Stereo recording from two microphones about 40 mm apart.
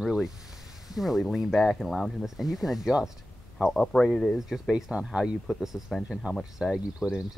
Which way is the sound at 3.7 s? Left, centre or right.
Centre.